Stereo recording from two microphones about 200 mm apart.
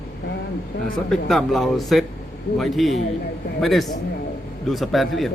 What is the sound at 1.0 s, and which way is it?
A man's voice, centre (ahead or behind).